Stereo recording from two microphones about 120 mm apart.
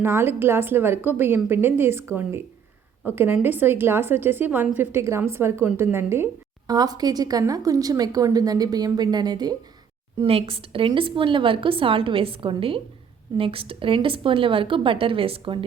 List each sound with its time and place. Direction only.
0.0 s a woman's voice: 20° right (ahead or behind)
6.7 s a woman's voice: 35° right (ahead or behind)
10.2 s speech: 50° right (ahead or behind)